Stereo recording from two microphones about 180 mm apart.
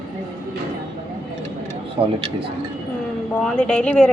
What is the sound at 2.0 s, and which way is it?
Speech, 25° right (ahead or behind).